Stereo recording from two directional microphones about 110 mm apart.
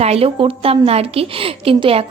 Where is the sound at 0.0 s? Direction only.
65° right (ahead or behind).